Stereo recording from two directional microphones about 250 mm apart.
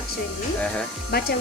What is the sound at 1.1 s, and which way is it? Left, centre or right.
Speech, left.